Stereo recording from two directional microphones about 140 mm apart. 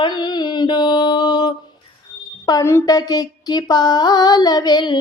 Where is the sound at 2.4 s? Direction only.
25° left (ahead or behind).